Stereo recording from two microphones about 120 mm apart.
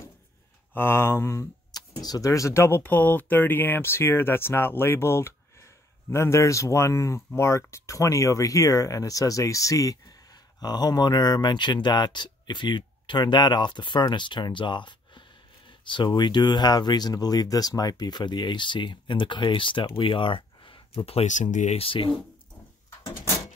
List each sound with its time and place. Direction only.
0.7 s speech: 20° left (ahead or behind)
1.7 s speech: 35° left (ahead or behind); by 21.7 s 90° left
21.7 s speech: 45° left (ahead or behind)
23.0 s door: 20° left (ahead or behind)